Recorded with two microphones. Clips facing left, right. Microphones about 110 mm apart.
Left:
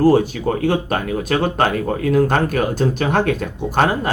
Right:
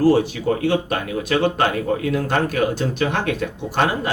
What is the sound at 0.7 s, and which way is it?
Speech, 45° left (ahead or behind).